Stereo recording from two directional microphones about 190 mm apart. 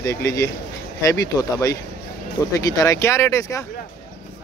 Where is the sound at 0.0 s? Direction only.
15° left (ahead or behind).